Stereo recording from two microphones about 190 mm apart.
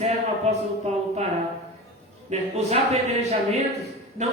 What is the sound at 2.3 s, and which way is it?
Speech, 35° right (ahead or behind).